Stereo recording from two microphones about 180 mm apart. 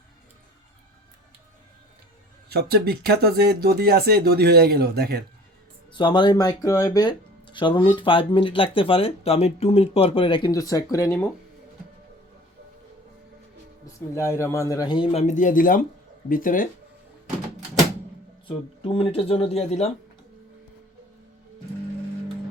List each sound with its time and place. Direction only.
2.5 s speech: 60° right (ahead or behind)
5.9 s speech: 25° left (ahead or behind)
14.2 s a man's voice: 15° left (ahead or behind)
15.1 s speech: 40° left (ahead or behind)
18.4 s speech: 30° left (ahead or behind)